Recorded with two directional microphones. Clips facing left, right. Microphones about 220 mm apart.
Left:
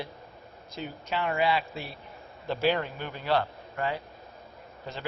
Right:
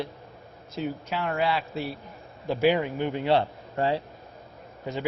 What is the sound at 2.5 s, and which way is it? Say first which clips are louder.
A man's voice: right 4 dB; 10° right (ahead or behind).